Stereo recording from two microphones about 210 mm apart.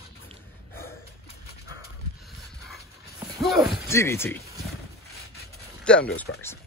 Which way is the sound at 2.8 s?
15° right (ahead or behind).